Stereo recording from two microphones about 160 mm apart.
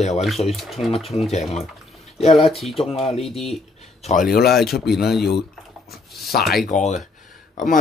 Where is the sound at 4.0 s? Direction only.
45° left (ahead or behind).